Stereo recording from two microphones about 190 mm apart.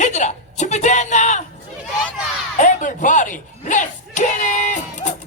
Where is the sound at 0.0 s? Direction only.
40° left (ahead or behind).